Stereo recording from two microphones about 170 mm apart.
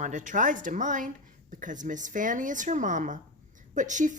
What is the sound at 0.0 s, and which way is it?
A woman's voice, 45° right (ahead or behind).